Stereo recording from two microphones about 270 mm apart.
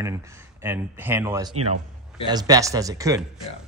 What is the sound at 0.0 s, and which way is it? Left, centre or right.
Speech, centre.